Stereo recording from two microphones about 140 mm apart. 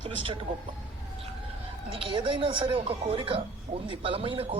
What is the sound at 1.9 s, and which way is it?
Speech, 40° right (ahead or behind).